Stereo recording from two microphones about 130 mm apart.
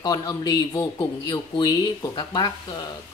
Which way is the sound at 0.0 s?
30° left (ahead or behind).